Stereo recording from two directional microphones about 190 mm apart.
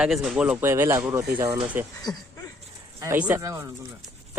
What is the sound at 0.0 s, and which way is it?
Speech, centre (ahead or behind).